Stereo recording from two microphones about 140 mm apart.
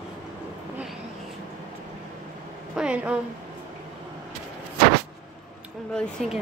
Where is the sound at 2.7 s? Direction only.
5° right (ahead or behind).